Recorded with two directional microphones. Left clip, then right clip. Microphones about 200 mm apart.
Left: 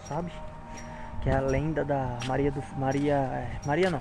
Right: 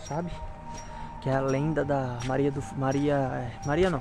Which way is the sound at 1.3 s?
20° right (ahead or behind).